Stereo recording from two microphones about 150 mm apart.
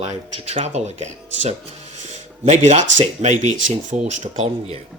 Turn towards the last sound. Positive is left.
turn(degrees=-45)  # may be behind; listen again after turning